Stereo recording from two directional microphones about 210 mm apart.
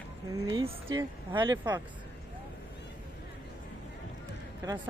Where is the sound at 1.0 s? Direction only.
20° right (ahead or behind).